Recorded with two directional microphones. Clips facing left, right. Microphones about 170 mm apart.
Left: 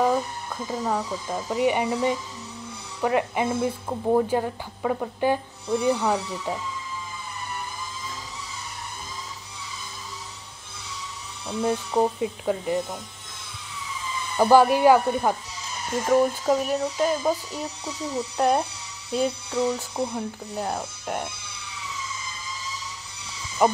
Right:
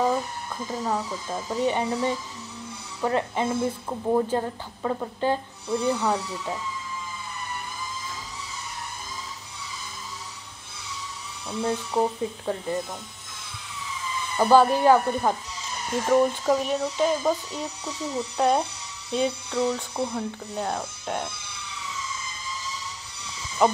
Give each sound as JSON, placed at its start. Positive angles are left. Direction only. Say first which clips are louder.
{"t": 1.3, "sound": "speech", "louder": "left 2 dB", "side_deg": 10}
{"t": 11.6, "sound": "speech", "louder": "left 2 dB", "side_deg": 15}
{"t": 14.3, "sound": "speech", "louder": "left 1 dB", "side_deg": 10}
{"t": 23.6, "sound": "speech", "louder": "even", "side_deg": 5}